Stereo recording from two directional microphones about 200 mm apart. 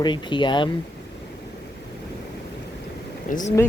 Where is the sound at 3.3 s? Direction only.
40° left (ahead or behind).